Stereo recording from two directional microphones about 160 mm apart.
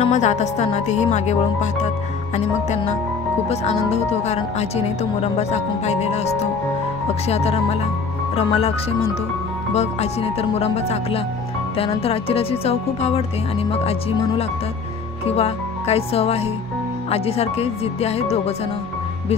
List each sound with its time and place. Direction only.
0.0 s speech: 45° left (ahead or behind)
3.4 s speech: 45° left (ahead or behind)
9.8 s speech: 40° left (ahead or behind)
15.2 s speech: 40° left (ahead or behind)